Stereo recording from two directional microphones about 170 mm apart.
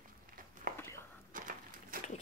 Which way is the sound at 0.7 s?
15° left (ahead or behind).